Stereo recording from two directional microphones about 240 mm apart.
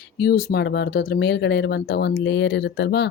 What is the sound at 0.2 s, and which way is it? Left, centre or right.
Speech, left.